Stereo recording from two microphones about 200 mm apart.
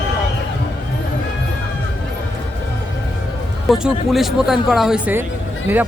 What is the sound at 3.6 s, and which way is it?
Speech, centre (ahead or behind).